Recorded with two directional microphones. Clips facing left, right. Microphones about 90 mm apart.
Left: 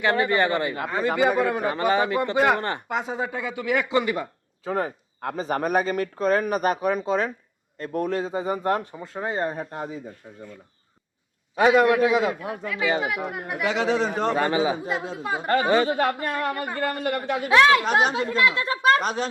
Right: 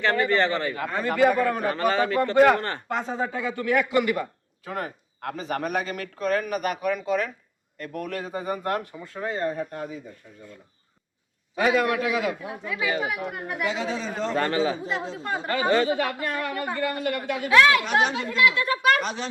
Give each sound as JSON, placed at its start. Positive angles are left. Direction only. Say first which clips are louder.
{"t": 0.0, "sound": "speech", "louder": "left 1 dB", "side_deg": 15}
{"t": 11.5, "sound": "speech", "louder": "left 5 dB", "side_deg": 25}
{"t": 13.1, "sound": "speech", "louder": "left 2 dB", "side_deg": 0}
{"t": 13.7, "sound": "speech", "louder": "left 7 dB", "side_deg": 80}
{"t": 14.3, "sound": "speech", "louder": "left 2 dB", "side_deg": 10}
{"t": 16.0, "sound": "speech", "louder": "left 3 dB", "side_deg": 40}